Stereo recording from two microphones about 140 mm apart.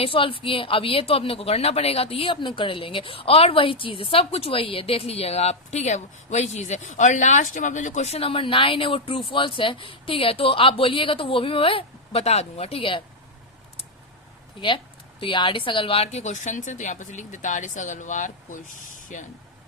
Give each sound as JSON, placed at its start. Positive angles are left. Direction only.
{"t": 0.0, "sound": "a woman's voice", "side_deg": 40}
{"t": 14.6, "sound": "a woman's voice", "side_deg": 35}